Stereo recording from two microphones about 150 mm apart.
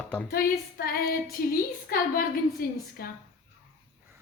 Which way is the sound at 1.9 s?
80° left.